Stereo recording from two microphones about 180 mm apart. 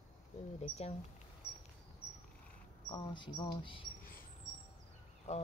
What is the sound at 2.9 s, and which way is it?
Speech, 25° left (ahead or behind).